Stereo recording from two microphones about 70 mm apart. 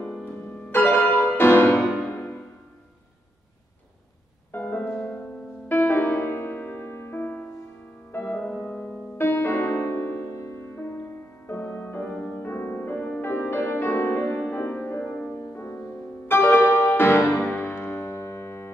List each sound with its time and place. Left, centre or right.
0.2 s music: left
4.5 s music: left
4.8 s music: centre
8.2 s music: centre
9.2 s music: left
12.4 s music: left
15.0 s music: centre
15.3 s music: left
18.1 s piano: left